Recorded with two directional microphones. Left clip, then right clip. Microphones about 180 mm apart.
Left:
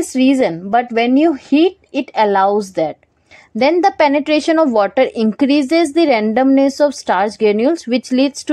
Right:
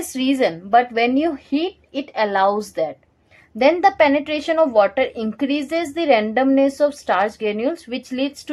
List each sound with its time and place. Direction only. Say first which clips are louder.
0.0 s speech: left 5 dB; 35° left (ahead or behind)
2.1 s a woman's voice: left 5 dB; 25° left (ahead or behind)